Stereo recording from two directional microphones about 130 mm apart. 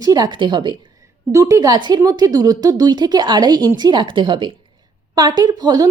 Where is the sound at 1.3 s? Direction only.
25° right (ahead or behind).